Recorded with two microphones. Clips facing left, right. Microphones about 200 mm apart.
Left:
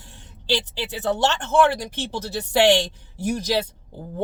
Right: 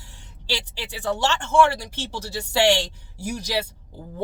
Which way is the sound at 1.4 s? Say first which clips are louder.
Right 1 dB; 20° left (ahead or behind).